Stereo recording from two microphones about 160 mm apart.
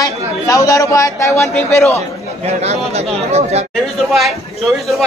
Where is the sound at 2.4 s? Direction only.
40° right (ahead or behind).